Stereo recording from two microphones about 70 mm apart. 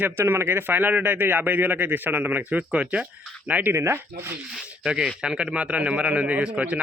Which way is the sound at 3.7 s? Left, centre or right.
Right.